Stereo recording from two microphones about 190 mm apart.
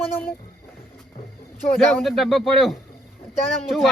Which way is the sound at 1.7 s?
Centre (ahead or behind).